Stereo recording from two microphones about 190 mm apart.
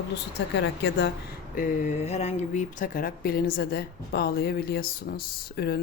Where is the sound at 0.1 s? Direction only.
65° left (ahead or behind).